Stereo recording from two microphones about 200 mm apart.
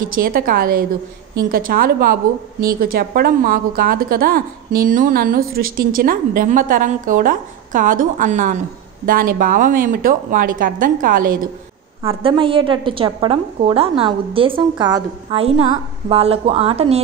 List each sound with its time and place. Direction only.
0.0 s a woman's voice: 45° right (ahead or behind)
12.1 s a woman's voice: 25° right (ahead or behind)